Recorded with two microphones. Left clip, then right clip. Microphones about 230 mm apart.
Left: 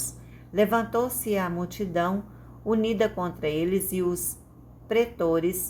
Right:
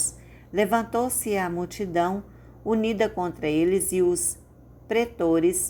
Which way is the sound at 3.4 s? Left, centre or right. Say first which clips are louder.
Right 4 dB; right.